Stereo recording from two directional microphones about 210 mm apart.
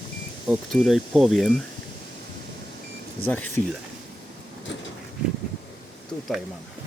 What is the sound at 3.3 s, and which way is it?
Speech, 10° left (ahead or behind).